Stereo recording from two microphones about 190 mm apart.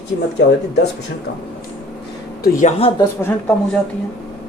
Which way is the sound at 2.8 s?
30° left (ahead or behind).